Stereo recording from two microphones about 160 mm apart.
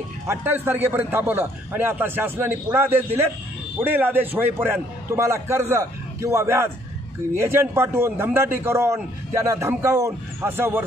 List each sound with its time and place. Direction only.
0.3 s a man's voice: 10° right (ahead or behind)